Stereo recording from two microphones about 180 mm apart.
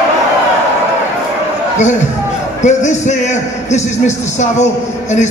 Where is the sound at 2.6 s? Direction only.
40° left (ahead or behind).